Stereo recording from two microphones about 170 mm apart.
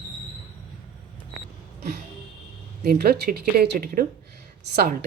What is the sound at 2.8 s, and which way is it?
A woman's voice, 65° right (ahead or behind).